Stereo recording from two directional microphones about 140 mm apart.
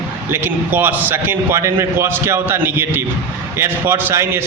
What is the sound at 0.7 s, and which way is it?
A man's voice, 15° right (ahead or behind).